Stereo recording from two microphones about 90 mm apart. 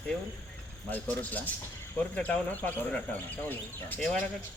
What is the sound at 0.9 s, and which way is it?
Speech, 15° left (ahead or behind).